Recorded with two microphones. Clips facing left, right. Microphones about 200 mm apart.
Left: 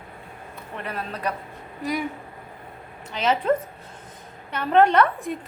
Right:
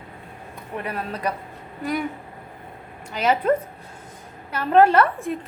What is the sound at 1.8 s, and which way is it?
Speech, centre (ahead or behind).